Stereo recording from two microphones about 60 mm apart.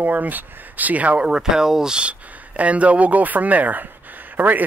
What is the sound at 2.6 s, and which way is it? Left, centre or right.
Speech, right.